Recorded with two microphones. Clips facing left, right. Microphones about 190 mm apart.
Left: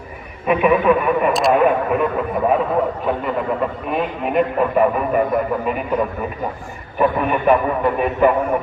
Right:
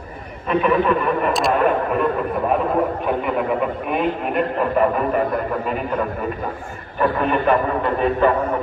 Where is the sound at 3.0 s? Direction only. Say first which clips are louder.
Even; 5° right (ahead or behind).